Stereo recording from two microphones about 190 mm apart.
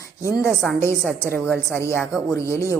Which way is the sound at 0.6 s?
10° left (ahead or behind).